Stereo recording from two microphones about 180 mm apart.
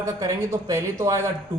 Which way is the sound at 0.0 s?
15° right (ahead or behind).